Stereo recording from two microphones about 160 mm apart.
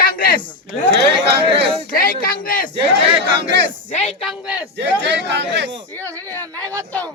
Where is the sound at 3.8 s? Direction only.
45° left (ahead or behind).